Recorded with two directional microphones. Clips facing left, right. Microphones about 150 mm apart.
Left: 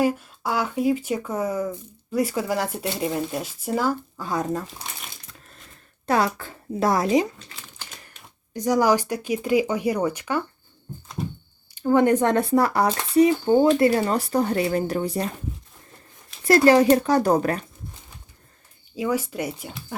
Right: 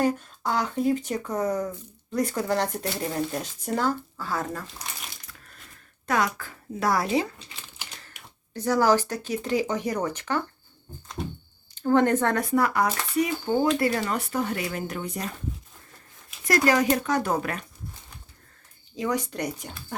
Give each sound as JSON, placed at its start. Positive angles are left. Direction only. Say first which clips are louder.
{"t": 0.0, "sound": "speech", "louder": "left 2 dB", "side_deg": 10}
{"t": 2.7, "sound": "speech", "louder": "left 2 dB", "side_deg": 20}
{"t": 3.0, "sound": "speech", "louder": "left 3 dB", "side_deg": 10}
{"t": 4.2, "sound": "speech", "louder": "left 5 dB", "side_deg": 20}
{"t": 6.1, "sound": "speech", "louder": "left 4 dB", "side_deg": 30}
{"t": 8.5, "sound": "speech", "louder": "left 2 dB", "side_deg": 15}
{"t": 11.7, "sound": "speech", "louder": "left 3 dB", "side_deg": 10}
{"t": 16.5, "sound": "speech", "louder": "left 7 dB", "side_deg": 30}
{"t": 18.9, "sound": "speech", "louder": "left 3 dB", "side_deg": 5}